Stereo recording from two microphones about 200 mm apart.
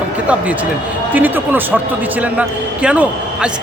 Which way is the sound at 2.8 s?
5° right (ahead or behind).